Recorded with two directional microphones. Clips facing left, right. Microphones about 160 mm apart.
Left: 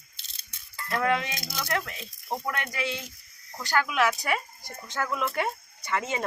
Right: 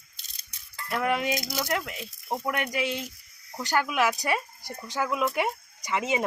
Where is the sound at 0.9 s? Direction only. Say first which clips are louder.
Even; 10° right (ahead or behind).